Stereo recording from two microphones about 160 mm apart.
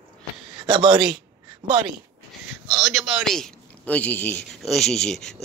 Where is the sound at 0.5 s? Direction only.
30° right (ahead or behind).